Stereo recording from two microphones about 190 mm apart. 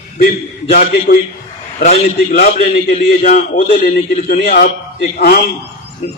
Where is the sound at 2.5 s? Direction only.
35° left (ahead or behind).